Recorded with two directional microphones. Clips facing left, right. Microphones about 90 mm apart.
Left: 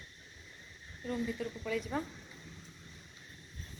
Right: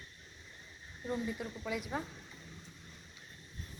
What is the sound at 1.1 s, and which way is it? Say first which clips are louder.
Speech: left 1 dB; 15° right (ahead or behind).